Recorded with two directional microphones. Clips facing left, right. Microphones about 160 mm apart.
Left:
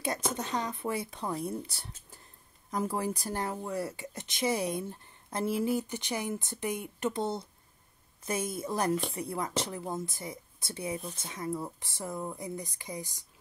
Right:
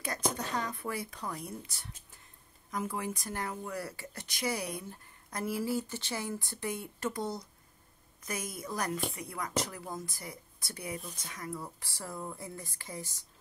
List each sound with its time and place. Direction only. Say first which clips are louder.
0.3 s speech: left 2 dB; 20° left (ahead or behind)